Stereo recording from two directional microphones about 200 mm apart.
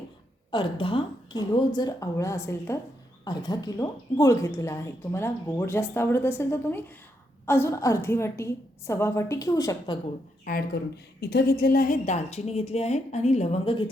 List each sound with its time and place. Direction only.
0.5 s a woman's voice: 25° left (ahead or behind)
10.4 s a woman's voice: 50° left (ahead or behind); by 13.9 s 25° left (ahead or behind)